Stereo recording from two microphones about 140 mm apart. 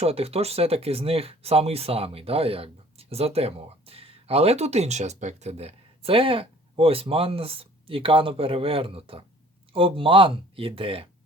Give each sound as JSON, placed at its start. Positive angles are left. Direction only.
{"t": 0.0, "sound": "speech", "side_deg": -45}